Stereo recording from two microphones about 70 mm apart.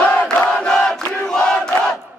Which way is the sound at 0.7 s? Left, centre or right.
Centre.